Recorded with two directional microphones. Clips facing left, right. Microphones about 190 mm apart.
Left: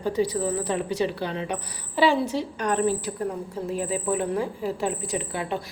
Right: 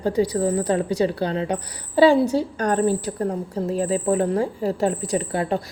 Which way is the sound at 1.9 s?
40° right (ahead or behind).